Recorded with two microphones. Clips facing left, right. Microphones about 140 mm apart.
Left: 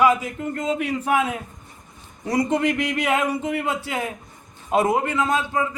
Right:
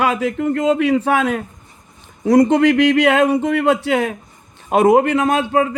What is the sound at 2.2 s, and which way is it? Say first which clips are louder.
A man's voice: right 9 dB; 65° right (ahead or behind).